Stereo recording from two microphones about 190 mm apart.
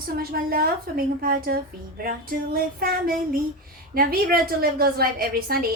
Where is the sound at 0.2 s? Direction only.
50° right (ahead or behind).